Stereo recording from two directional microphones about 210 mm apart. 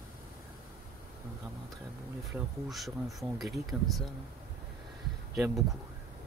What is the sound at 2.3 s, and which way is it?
Speech, centre (ahead or behind).